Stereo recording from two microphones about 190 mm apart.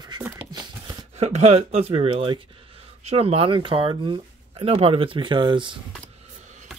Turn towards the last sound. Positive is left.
turn(degrees=-25)  # may be behind; listen again after turning